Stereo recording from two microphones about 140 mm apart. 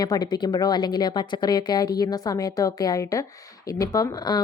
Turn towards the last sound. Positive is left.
turn(degrees=30)  # may be behind; listen again after turning